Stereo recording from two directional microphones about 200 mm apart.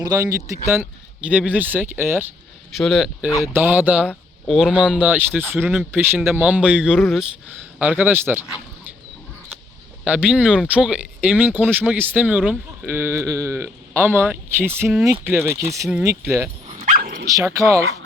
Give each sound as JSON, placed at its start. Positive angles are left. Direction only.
{"t": 0.0, "sound": "speech", "side_deg": -15}
{"t": 2.7, "sound": "speech", "side_deg": 0}
{"t": 10.0, "sound": "speech", "side_deg": -5}
{"t": 16.8, "sound": "dog", "side_deg": -45}
{"t": 17.2, "sound": "speech", "side_deg": -15}